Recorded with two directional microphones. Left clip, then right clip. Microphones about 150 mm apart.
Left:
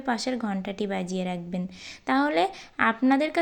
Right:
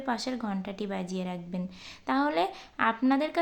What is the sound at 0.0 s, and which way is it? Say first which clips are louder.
Speech: left 4 dB; 20° left (ahead or behind).